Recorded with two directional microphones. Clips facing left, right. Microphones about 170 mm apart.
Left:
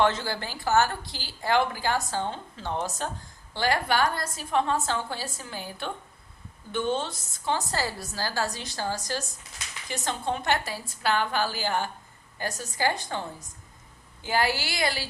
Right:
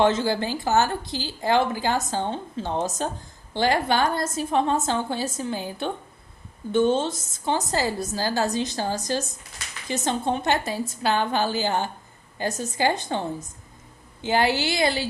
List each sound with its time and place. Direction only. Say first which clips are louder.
0.0 s a woman's voice: right 5 dB; 20° right (ahead or behind)